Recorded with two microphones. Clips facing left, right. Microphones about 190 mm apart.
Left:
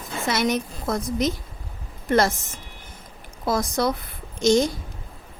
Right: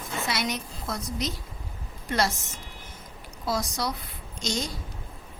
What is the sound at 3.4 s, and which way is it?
A woman's voice, 55° left (ahead or behind).